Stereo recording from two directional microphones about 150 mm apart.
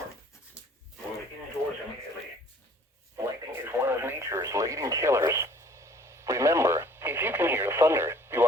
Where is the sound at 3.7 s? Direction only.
15° right (ahead or behind).